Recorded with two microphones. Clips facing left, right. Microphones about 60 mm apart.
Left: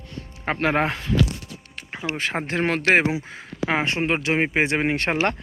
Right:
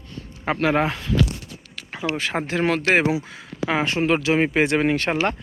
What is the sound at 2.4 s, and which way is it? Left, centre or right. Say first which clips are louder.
Speech: even; left.